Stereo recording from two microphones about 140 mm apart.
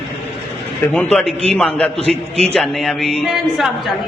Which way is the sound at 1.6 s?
10° left (ahead or behind).